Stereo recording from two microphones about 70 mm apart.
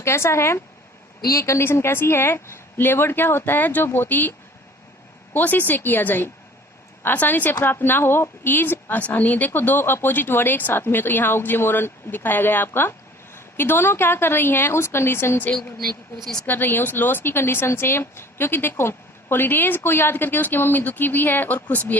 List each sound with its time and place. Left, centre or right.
0.0 s a woman's voice: left
16.1 s a woman's voice: centre
16.5 s speech: left